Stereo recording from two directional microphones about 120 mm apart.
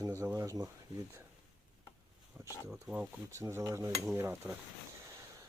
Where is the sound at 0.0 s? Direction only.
25° right (ahead or behind).